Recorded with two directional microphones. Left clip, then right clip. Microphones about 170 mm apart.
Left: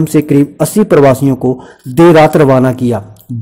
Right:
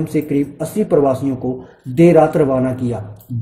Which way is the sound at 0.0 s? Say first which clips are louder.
Left 9 dB; 35° left (ahead or behind).